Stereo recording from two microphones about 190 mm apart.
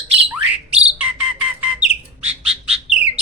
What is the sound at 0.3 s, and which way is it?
Bird, 5° right (ahead or behind).